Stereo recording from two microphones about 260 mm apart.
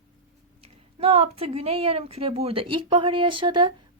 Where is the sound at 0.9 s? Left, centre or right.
Right.